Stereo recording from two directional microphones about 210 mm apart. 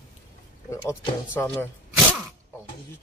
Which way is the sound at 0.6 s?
15° left (ahead or behind).